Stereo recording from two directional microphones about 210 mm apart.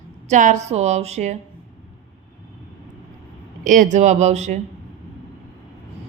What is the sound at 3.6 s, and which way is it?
A woman's voice, 35° right (ahead or behind).